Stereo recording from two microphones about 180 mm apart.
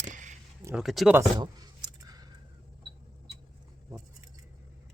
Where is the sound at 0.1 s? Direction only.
45° right (ahead or behind).